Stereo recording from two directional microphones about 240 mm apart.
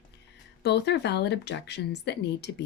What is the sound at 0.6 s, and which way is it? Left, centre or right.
Speech, left.